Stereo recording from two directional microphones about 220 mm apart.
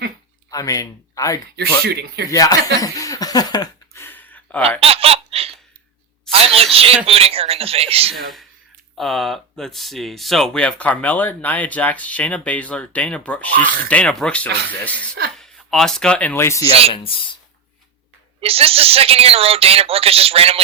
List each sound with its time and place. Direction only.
0.5 s speech: 15° left (ahead or behind)
1.8 s speech: 45° right (ahead or behind)
2.3 s a sound: 15° left (ahead or behind)
4.8 s laughter: 25° right (ahead or behind)
6.3 s a sound: 25° right (ahead or behind)
6.7 s speech: 25° right (ahead or behind)
9.0 s speech: centre (ahead or behind)
16.9 s speech: 25° left (ahead or behind)
18.3 s speech: 25° right (ahead or behind)